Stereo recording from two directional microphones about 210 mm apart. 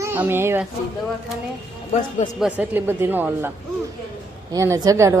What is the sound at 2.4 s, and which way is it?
A woman's voice, 5° right (ahead or behind).